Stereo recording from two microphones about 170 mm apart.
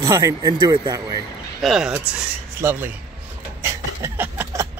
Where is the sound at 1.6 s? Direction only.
5° right (ahead or behind).